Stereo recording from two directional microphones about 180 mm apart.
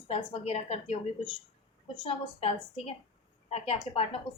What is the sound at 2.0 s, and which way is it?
Speech, 30° left (ahead or behind).